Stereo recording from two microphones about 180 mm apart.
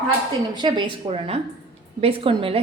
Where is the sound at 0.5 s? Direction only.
25° right (ahead or behind).